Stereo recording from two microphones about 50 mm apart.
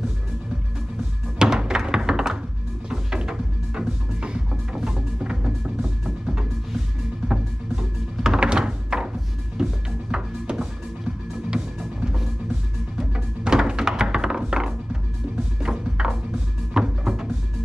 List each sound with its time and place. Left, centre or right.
1.4 s thunk: centre
2.9 s music: centre